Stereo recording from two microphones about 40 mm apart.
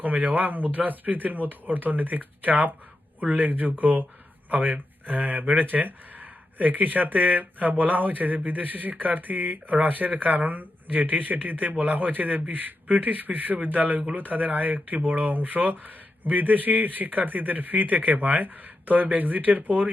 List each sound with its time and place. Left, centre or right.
0.0 s speech: right